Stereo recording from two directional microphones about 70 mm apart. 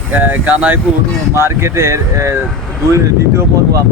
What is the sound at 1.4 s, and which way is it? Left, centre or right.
Speech, right.